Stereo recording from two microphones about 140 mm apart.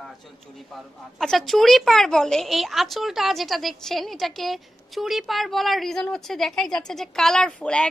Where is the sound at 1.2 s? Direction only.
Centre (ahead or behind).